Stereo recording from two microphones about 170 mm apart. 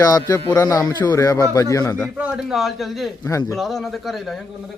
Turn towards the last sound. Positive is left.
turn(degrees=0)  # may be behind; listen again after turning